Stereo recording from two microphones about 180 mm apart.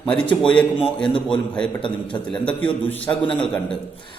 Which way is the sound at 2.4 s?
10° left (ahead or behind).